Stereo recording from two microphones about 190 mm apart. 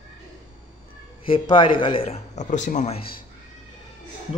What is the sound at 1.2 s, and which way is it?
Speech, 25° left (ahead or behind).